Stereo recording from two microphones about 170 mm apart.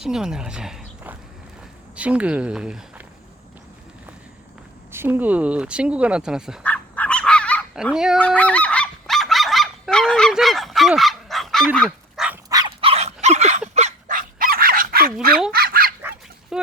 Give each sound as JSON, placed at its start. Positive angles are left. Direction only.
{"t": 0.0, "sound": "speech", "side_deg": -5}
{"t": 4.9, "sound": "speech", "side_deg": -10}
{"t": 6.6, "sound": "dog", "side_deg": 10}
{"t": 7.9, "sound": "speech", "side_deg": -5}
{"t": 8.4, "sound": "goose", "side_deg": 10}
{"t": 11.9, "sound": "goose", "side_deg": -5}
{"t": 12.5, "sound": "dog", "side_deg": -20}
{"t": 12.8, "sound": "dog", "side_deg": -40}
{"t": 16.0, "sound": "dog", "side_deg": -15}